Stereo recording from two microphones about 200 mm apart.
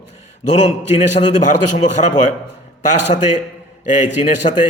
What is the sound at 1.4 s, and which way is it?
Speech, 35° left (ahead or behind).